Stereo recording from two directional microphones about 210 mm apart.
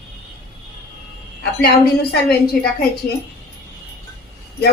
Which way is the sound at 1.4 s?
50° left (ahead or behind).